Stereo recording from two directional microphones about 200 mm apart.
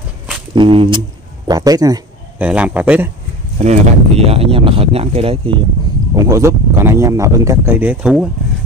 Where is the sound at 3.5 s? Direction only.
35° right (ahead or behind).